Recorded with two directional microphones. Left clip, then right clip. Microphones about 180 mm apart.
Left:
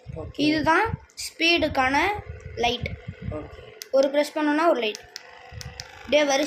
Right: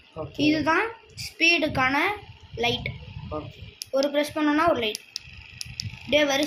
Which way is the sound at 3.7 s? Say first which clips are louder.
Left 3 dB; 20° left (ahead or behind).